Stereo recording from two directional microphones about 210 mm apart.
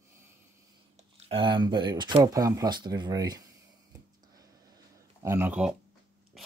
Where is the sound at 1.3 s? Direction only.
20° right (ahead or behind).